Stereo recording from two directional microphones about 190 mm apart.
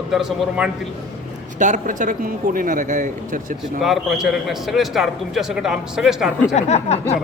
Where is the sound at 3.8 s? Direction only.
Centre (ahead or behind).